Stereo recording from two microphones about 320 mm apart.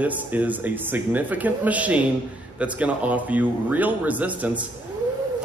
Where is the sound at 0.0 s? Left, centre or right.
Centre.